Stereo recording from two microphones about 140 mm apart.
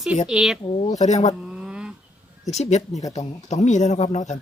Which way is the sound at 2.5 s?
50° left (ahead or behind).